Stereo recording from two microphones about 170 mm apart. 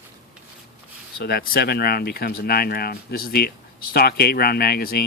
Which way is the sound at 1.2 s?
65° left (ahead or behind).